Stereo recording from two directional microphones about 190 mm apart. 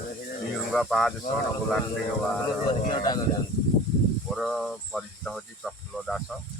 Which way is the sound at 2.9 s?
20° left (ahead or behind).